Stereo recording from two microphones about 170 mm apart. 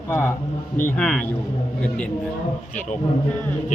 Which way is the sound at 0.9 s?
5° left (ahead or behind).